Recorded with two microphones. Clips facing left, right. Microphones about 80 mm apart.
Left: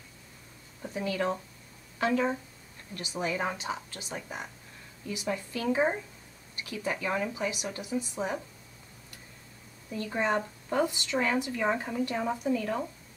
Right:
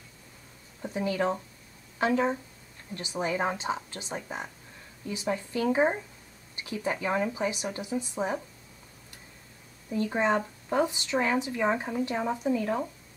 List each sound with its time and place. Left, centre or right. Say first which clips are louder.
0.8 s speech: right 2 dB; centre
9.8 s a woman's voice: right 3 dB; centre